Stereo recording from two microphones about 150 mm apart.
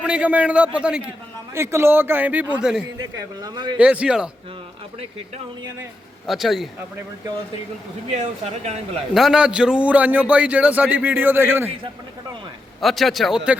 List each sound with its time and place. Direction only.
0.0 s a man's voice: 10° right (ahead or behind)
1.5 s a man's voice: 15° right (ahead or behind)
3.0 s a man's voice: 25° right (ahead or behind)
3.8 s a man's voice: 10° right (ahead or behind)
6.2 s a man's voice: centre (ahead or behind)
8.1 s speech: 50° right (ahead or behind)
9.1 s a man's voice: 5° right (ahead or behind)
12.8 s a man's voice: centre (ahead or behind)